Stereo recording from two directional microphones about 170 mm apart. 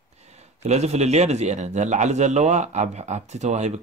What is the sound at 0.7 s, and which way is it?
A man's voice, 40° right (ahead or behind).